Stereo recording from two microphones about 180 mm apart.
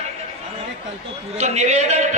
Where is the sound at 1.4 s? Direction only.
40° right (ahead or behind).